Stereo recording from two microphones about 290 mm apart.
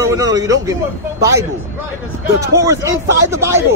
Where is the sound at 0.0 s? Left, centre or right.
Centre.